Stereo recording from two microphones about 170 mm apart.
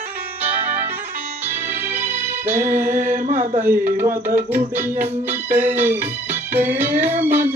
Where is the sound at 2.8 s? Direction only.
55° right (ahead or behind).